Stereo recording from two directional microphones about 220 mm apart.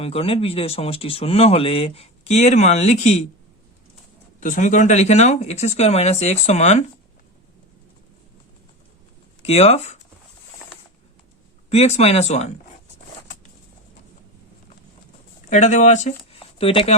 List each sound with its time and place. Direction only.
0.0 s speech: 25° left (ahead or behind)
4.4 s speech: 35° left (ahead or behind)
9.4 s speech: 30° left (ahead or behind)
11.7 s speech: 30° left (ahead or behind)
15.4 s speech: 35° left (ahead or behind)